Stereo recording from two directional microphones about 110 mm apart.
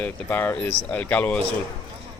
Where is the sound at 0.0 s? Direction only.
15° left (ahead or behind).